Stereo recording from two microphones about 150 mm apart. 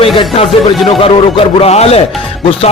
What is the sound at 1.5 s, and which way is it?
Speech, 45° left (ahead or behind).